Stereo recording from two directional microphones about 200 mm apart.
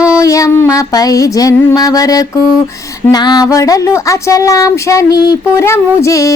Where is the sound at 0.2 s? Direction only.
15° left (ahead or behind).